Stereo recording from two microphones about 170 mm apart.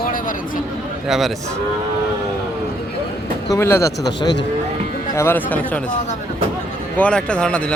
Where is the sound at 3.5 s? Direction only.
15° left (ahead or behind).